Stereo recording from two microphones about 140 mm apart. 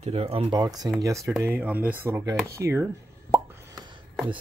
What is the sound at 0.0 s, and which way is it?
Speech, 45° right (ahead or behind).